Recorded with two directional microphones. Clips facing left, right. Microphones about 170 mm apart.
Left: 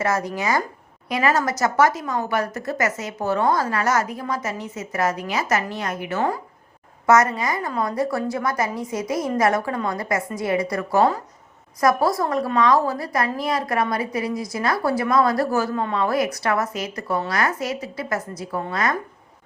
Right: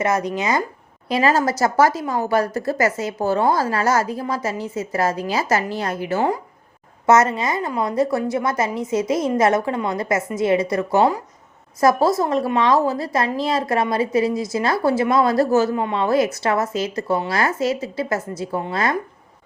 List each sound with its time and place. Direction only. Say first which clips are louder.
0.0 s a woman's voice: right 2 dB; 20° right (ahead or behind)